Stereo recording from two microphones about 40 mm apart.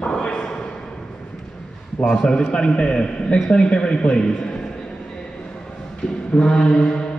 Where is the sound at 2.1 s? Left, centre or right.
Centre.